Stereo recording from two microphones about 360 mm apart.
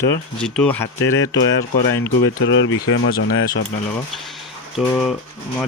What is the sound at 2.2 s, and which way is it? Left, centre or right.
Speech, left.